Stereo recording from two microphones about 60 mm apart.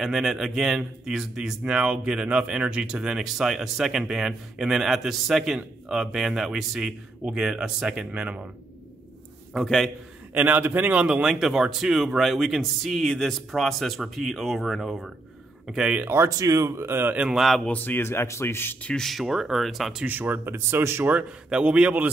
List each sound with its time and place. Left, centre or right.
0.0 s speech: centre
8.1 s a man's voice: right
9.5 s speech: centre
10.3 s a man's voice: right
11.1 s speech: centre
15.6 s speech: centre
16.3 s speech: right
17.3 s speech: centre
17.6 s a man's voice: left
18.9 s speech: centre
19.2 s speech: centre
20.1 s speech: right
20.5 s speech: right
21.5 s a man's voice: centre